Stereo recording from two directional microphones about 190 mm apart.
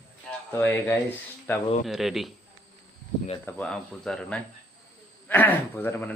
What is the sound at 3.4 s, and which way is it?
Speech, 5° left (ahead or behind).